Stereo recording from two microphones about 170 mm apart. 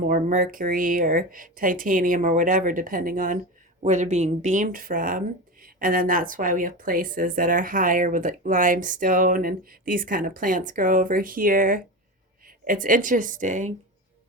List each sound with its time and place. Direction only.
0.0 s speech: 50° right (ahead or behind)